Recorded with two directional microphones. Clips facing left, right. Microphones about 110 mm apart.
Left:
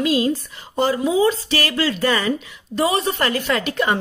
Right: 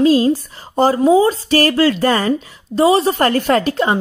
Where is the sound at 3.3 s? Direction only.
45° right (ahead or behind).